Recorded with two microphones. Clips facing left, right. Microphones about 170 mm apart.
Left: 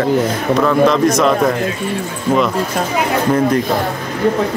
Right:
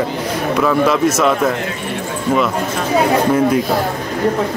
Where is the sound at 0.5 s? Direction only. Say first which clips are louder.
Left 2 dB; 5° right (ahead or behind).